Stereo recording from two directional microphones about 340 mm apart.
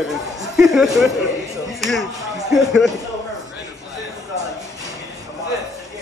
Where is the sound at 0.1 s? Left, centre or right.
Centre.